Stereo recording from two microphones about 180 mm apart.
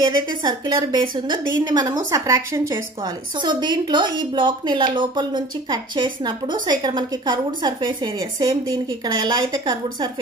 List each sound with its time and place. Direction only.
0.0 s a woman's voice: 25° right (ahead or behind)